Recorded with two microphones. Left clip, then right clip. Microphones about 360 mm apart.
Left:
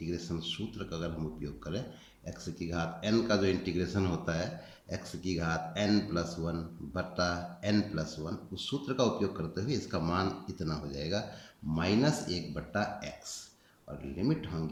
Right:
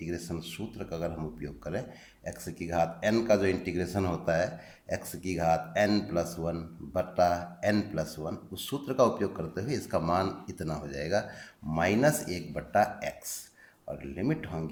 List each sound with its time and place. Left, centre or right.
0.0 s speech: centre